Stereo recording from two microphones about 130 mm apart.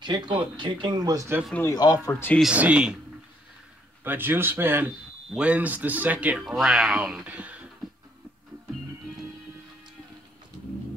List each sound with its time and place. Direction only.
0.0 s speech: 35° right (ahead or behind)
1.7 s speech: 30° left (ahead or behind)
2.0 s speech: 20° left (ahead or behind)
2.5 s a man's voice: 10° right (ahead or behind)
4.0 s a man's voice: 15° right (ahead or behind)